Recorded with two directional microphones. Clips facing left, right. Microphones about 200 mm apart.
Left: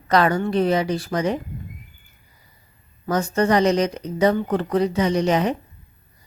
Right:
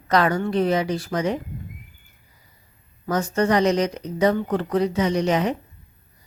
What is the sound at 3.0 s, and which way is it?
Speech, 30° left (ahead or behind).